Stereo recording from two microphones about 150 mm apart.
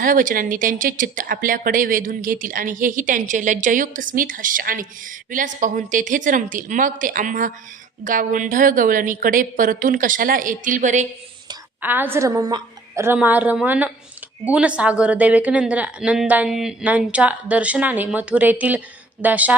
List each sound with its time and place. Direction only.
0.0 s speech: 65° right (ahead or behind)
11.8 s a woman's voice: 15° right (ahead or behind)
13.1 s a woman's voice: 10° right (ahead or behind)